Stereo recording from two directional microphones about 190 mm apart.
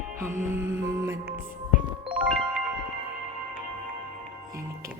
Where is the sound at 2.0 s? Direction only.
Centre (ahead or behind).